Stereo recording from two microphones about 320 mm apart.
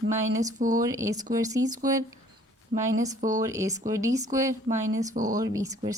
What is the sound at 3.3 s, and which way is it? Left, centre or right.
Speech, centre.